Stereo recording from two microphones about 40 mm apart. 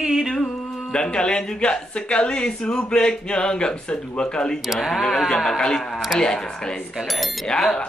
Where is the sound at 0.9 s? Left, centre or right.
Left.